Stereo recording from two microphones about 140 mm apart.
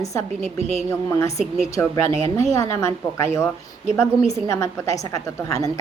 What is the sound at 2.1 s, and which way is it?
Speech, 40° right (ahead or behind).